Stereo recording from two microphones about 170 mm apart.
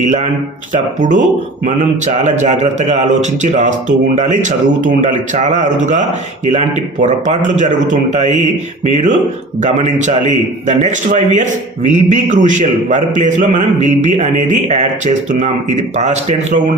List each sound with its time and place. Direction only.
0.0 s a man's voice: 45° right (ahead or behind)